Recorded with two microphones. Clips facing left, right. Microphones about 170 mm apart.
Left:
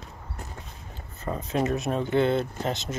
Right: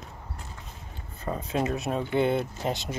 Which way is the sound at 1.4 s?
30° right (ahead or behind).